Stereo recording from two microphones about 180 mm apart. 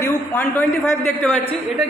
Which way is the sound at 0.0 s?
10° left (ahead or behind).